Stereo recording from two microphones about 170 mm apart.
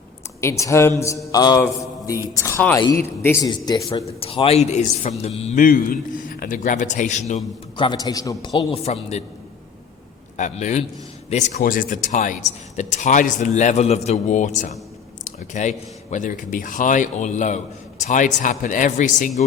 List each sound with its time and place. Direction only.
0.4 s a man's voice: 15° left (ahead or behind)
4.0 s a man's voice: 35° left (ahead or behind)
5.5 s speech: 55° left (ahead or behind)
7.8 s a man's voice: 25° left (ahead or behind); by 9.2 s 40° left (ahead or behind)
10.3 s a man's voice: 45° left (ahead or behind)
11.6 s speech: 55° left (ahead or behind)